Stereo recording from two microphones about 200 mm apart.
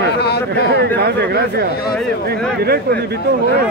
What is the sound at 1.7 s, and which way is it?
Speech, 50° left (ahead or behind).